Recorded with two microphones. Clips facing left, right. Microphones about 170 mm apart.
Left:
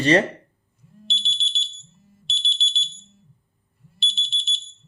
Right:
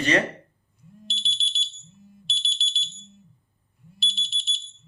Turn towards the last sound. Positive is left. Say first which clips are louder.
# left 2 dB
turn(degrees=-5)  # may be behind; listen again after turning